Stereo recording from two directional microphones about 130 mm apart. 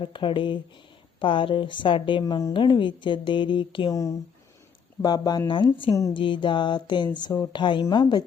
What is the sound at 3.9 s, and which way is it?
Speech, 25° left (ahead or behind).